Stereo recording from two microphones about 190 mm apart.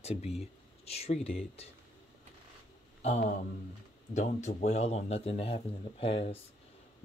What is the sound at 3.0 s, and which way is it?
A man's voice, 40° left (ahead or behind).